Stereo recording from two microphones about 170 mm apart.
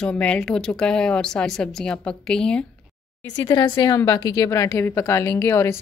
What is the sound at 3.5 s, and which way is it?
A woman's voice, 25° left (ahead or behind).